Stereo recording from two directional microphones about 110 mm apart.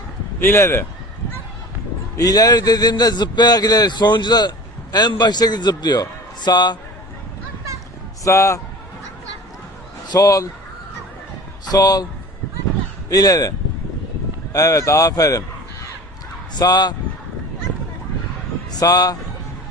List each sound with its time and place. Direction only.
0.3 s speech: 20° left (ahead or behind)
2.1 s a man's voice: 35° left (ahead or behind)
8.2 s speech: 25° left (ahead or behind)
10.1 s a man's voice: 30° left (ahead or behind)
11.6 s a man's voice: 35° left (ahead or behind)
13.1 s speech: 35° left (ahead or behind)
14.5 s a man's voice: 30° left (ahead or behind)
18.8 s a man's voice: 35° left (ahead or behind)